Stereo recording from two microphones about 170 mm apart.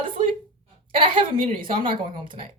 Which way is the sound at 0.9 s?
30° right (ahead or behind).